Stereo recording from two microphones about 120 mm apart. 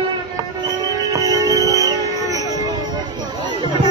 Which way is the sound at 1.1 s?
30° right (ahead or behind).